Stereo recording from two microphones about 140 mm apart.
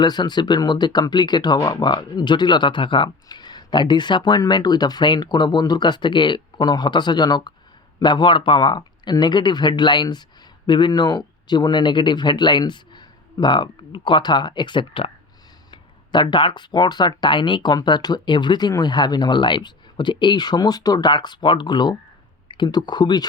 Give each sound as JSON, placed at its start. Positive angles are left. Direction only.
{"t": 0.0, "sound": "speech", "side_deg": 30}